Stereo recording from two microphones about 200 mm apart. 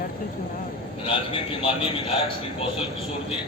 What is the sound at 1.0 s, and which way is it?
Speech, 25° left (ahead or behind).